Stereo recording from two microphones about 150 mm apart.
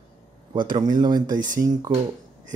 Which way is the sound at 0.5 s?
30° right (ahead or behind).